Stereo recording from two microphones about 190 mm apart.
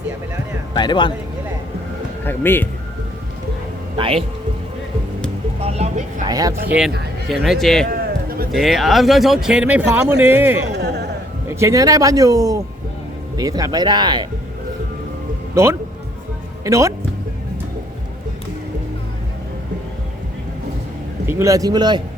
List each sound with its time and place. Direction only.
0.7 s speech: 25° left (ahead or behind)
2.2 s speech: 10° left (ahead or behind)
3.9 s a man's voice: 30° right (ahead or behind)
5.5 s vehicle: 35° right (ahead or behind)
6.2 s speech: 20° right (ahead or behind)
7.3 s speech: centre (ahead or behind)
7.9 s a sound: 50° right (ahead or behind)
8.5 s speech: centre (ahead or behind)
10.7 s a sound: 60° right (ahead or behind)
11.4 s speech: 15° right (ahead or behind)
16.6 s speech: 15° right (ahead or behind)
21.2 s speech: 15° right (ahead or behind)